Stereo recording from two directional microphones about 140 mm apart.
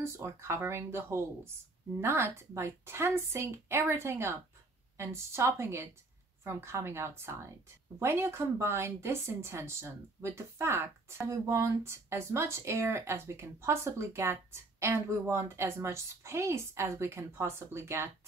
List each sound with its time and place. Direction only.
0.0 s speech: 20° right (ahead or behind)